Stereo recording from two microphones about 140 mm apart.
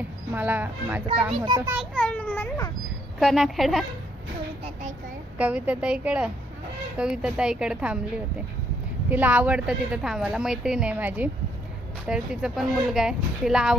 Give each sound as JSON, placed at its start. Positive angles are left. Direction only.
{"t": 0.3, "sound": "a woman's voice", "side_deg": -10}
{"t": 1.3, "sound": "a child's voice", "side_deg": -35}
{"t": 2.0, "sound": "a child's voice", "side_deg": 10}
{"t": 3.2, "sound": "speech", "side_deg": 0}
{"t": 5.4, "sound": "a woman's voice", "side_deg": -10}
{"t": 9.1, "sound": "a woman's voice", "side_deg": -10}